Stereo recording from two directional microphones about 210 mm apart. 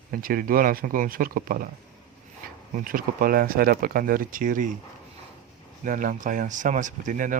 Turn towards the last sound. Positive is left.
turn(degrees=-40)  # may be behind; listen again after turning